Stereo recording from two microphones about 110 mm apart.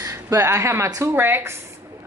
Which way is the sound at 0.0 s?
25° right (ahead or behind).